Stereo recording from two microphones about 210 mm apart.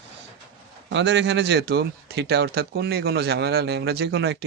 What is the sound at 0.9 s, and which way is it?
A man's voice, 60° right (ahead or behind).